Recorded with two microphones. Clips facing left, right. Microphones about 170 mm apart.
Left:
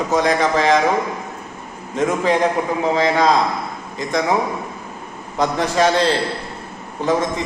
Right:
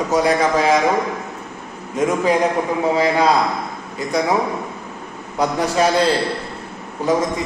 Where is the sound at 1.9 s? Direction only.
10° right (ahead or behind).